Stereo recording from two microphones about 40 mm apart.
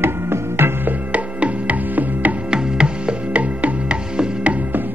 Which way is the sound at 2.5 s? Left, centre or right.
Right.